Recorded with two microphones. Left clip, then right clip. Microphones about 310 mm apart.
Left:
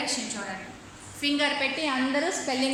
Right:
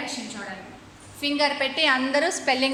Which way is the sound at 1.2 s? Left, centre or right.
Centre.